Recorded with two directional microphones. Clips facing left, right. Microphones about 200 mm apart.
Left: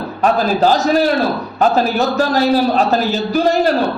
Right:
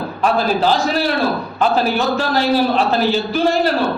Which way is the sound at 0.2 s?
40° left (ahead or behind).